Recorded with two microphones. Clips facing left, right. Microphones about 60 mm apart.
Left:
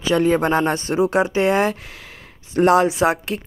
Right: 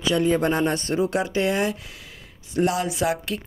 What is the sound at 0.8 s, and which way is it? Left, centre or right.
Speech, left.